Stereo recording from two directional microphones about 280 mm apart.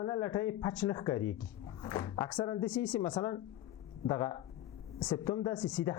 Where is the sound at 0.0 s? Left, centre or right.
Centre.